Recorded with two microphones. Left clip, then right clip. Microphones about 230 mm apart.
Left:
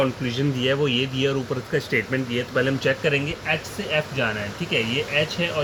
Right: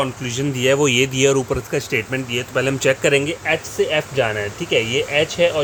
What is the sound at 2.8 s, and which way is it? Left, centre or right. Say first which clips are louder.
Speech: right 6 dB; right.